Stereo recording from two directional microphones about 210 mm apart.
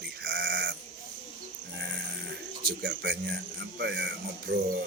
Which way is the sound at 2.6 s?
45° right (ahead or behind).